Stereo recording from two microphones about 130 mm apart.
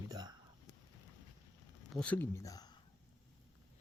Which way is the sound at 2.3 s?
25° left (ahead or behind).